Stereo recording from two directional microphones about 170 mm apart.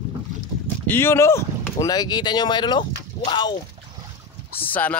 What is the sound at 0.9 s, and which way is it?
Speech, 15° left (ahead or behind).